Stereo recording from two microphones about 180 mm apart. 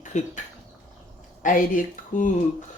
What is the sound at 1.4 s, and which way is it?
Speech, 45° left (ahead or behind).